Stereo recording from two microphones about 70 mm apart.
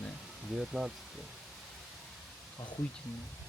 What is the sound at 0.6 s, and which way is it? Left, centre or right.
Speech, centre.